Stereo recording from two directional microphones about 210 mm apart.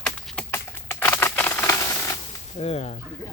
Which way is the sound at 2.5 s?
30° left (ahead or behind).